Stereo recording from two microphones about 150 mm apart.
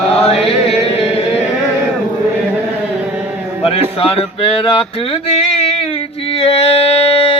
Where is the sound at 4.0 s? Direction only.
40° left (ahead or behind).